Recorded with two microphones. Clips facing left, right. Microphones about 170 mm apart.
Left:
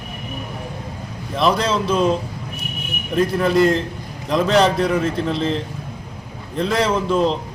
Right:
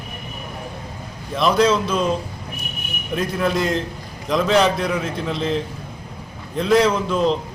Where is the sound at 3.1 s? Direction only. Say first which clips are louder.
Left 4 dB; centre (ahead or behind).